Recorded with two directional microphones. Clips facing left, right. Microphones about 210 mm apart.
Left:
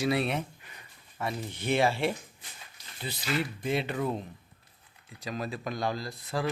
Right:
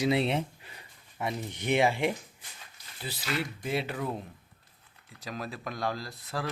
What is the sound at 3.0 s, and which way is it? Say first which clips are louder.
Speech: left 2 dB; centre (ahead or behind).